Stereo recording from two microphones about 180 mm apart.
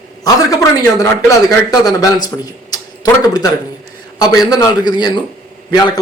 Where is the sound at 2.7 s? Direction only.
20° left (ahead or behind).